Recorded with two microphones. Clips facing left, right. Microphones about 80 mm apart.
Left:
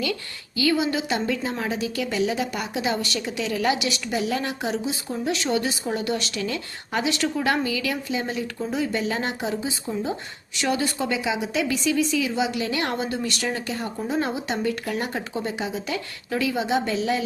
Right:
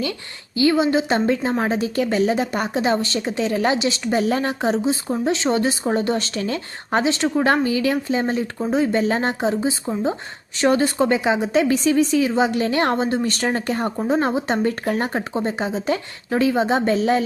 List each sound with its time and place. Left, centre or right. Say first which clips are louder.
0.0 s a woman's voice: right 1 dB; right